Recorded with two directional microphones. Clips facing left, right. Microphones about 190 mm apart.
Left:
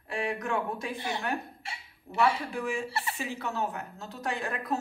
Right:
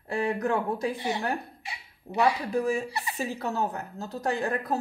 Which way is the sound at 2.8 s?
15° right (ahead or behind).